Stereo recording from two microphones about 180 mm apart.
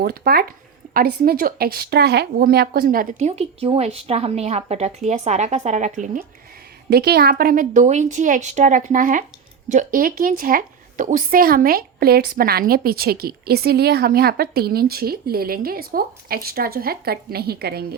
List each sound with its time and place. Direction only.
0.0 s a woman's voice: 60° right (ahead or behind); by 6.2 s 45° right (ahead or behind)
6.9 s a woman's voice: 60° right (ahead or behind)